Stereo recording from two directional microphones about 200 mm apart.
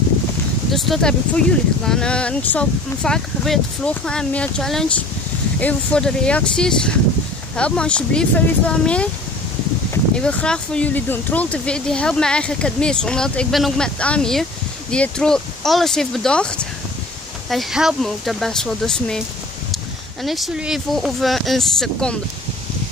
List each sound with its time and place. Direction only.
0.7 s speech: centre (ahead or behind)
10.1 s speech: 5° left (ahead or behind)
20.2 s speech: centre (ahead or behind)